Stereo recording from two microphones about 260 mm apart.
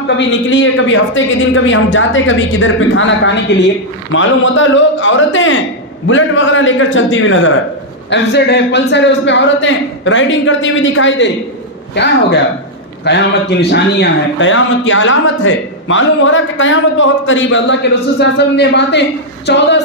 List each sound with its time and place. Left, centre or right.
0.0 s a man's voice: left